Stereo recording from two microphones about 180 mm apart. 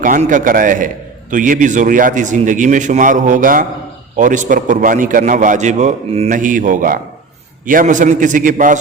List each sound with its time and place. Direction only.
0.0 s a man's voice: 45° right (ahead or behind)